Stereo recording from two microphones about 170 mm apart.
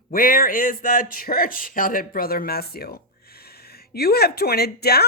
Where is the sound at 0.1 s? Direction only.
55° left (ahead or behind).